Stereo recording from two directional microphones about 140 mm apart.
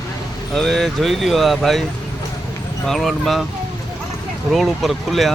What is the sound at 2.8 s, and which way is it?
Speech, centre (ahead or behind).